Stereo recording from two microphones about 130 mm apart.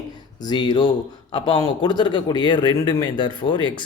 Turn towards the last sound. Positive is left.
turn(degrees=35)  # may be behind; listen again after turning